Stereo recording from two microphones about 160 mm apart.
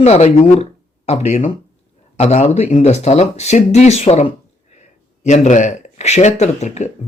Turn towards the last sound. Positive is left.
turn(degrees=45)  # may be behind; listen again after turning